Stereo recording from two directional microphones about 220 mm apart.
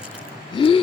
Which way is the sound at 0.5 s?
25° left (ahead or behind).